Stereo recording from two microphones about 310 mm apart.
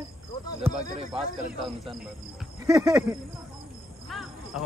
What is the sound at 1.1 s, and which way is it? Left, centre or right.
A man's voice, centre.